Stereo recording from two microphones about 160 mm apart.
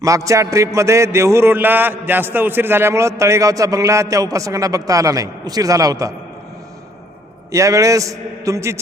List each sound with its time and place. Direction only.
0.0 s a man's voice: 20° right (ahead or behind)
7.5 s a man's voice: 20° right (ahead or behind)